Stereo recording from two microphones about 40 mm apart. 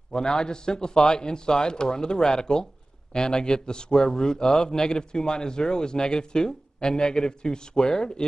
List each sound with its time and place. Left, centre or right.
0.1 s a man's voice: centre